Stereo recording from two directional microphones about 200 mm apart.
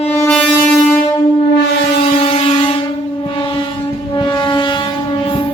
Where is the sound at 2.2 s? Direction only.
30° left (ahead or behind).